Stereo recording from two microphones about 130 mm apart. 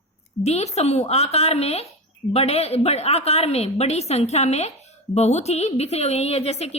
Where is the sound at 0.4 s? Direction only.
55° left (ahead or behind).